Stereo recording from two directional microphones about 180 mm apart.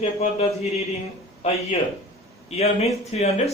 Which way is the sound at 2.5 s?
35° left (ahead or behind).